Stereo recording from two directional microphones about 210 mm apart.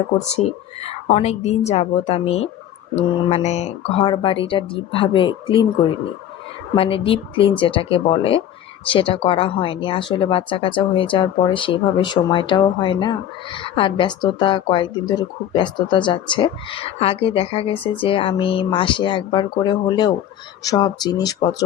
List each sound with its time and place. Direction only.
0.3 s speech: 30° left (ahead or behind)
6.7 s speech: 25° left (ahead or behind)